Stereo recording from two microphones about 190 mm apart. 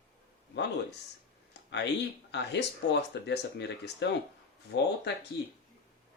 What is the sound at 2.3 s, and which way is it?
Speech, 65° left (ahead or behind).